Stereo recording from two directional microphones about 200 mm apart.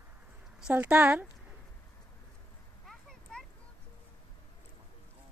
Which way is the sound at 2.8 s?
Centre (ahead or behind).